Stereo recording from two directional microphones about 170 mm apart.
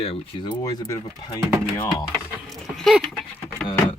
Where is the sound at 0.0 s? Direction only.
30° left (ahead or behind).